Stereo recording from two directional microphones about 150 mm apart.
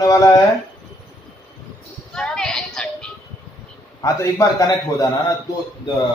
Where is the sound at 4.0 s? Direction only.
20° left (ahead or behind).